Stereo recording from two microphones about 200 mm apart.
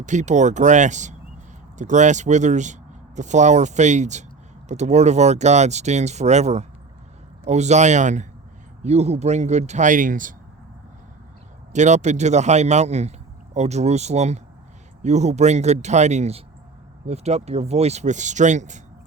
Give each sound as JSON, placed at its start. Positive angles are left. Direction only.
{"t": 0.0, "sound": "a man's voice", "side_deg": -35}
{"t": 11.7, "sound": "a man's voice", "side_deg": -35}